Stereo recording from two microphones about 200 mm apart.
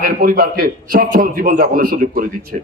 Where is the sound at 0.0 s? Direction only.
45° right (ahead or behind).